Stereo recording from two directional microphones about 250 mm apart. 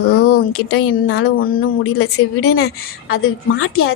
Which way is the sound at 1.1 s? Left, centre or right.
Left.